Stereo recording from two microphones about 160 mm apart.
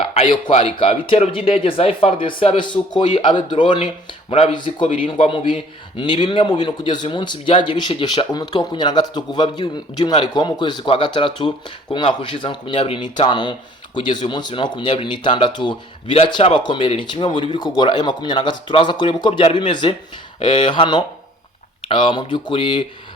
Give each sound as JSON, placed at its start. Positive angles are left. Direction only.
{"t": 0.0, "sound": "speech", "side_deg": 35}